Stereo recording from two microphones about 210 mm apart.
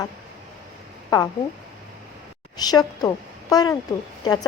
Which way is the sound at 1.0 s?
20° left (ahead or behind).